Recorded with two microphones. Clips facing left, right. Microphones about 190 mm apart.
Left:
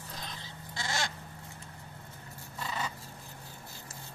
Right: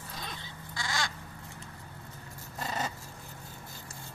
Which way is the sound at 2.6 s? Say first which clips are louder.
Right 2 dB; 45° right (ahead or behind).